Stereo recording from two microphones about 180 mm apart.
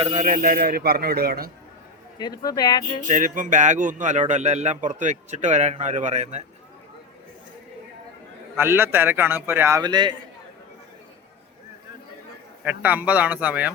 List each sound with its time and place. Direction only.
0.0 s a man's voice: 40° right (ahead or behind); by 1.5 s 60° right (ahead or behind)
2.1 s speech: 20° left (ahead or behind)
3.1 s a man's voice: 45° right (ahead or behind)
8.5 s a man's voice: 15° right (ahead or behind)
12.6 s a man's voice: 10° right (ahead or behind)